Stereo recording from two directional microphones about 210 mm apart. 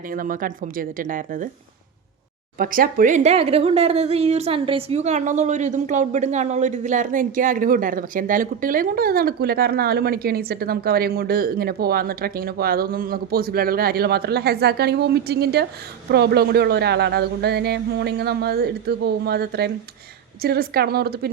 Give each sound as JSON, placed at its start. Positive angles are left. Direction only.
{"t": 0.1, "sound": "a woman's voice", "side_deg": -40}
{"t": 2.6, "sound": "speech", "side_deg": -45}